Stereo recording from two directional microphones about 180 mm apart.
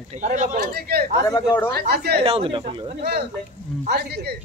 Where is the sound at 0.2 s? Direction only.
40° right (ahead or behind).